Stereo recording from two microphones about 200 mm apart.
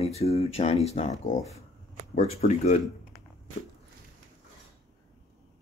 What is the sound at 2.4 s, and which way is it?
Speech, 35° left (ahead or behind).